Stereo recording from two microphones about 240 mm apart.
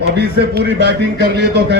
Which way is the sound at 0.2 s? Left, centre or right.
Right.